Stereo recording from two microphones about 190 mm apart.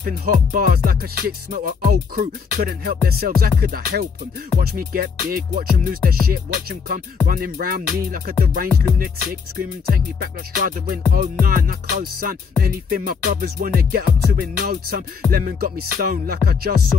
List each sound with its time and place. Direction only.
0.0 s music: 50° right (ahead or behind)
9.8 s music: 50° right (ahead or behind)